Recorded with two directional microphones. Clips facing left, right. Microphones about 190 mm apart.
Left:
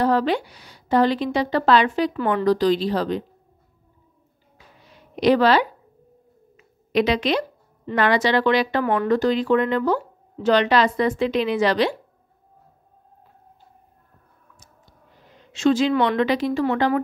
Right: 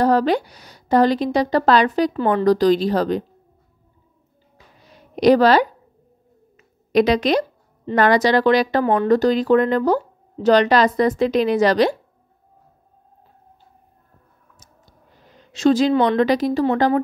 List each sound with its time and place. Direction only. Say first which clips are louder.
0.0 s a woman's voice: right 3 dB; 40° right (ahead or behind)
4.8 s a sound: right 4 dB; 40° right (ahead or behind)
6.5 s speech: right 4 dB; 40° right (ahead or behind)
15.5 s speech: right 3 dB; 40° right (ahead or behind)